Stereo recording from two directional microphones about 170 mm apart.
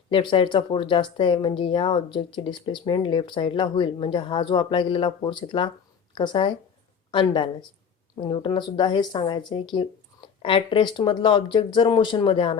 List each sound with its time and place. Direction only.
0.1 s speech: 30° left (ahead or behind)